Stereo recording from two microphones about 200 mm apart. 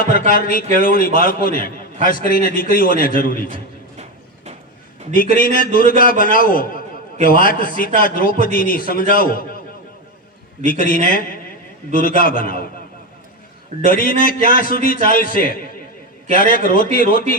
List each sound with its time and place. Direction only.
0.0 s a man's voice: 45° left (ahead or behind)
5.1 s a man's voice: 45° left (ahead or behind)
10.9 s a man's voice: 45° left (ahead or behind)
13.9 s a man's voice: 45° left (ahead or behind)